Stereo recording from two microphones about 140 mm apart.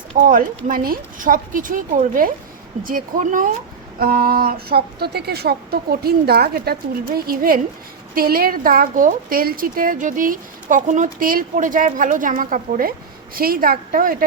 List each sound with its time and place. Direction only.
0.2 s speech: 80° right
4.0 s a woman's voice: 90° right
11.5 s speech: 70° right (ahead or behind)
13.3 s a woman's voice: 90° right